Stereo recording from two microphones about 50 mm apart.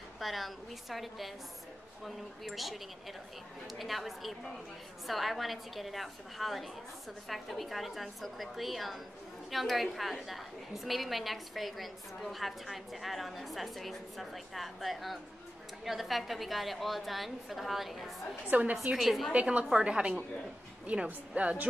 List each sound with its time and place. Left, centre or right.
0.2 s a woman's voice: centre
18.5 s a woman's voice: right
18.9 s a woman's voice: centre
19.3 s a woman's voice: right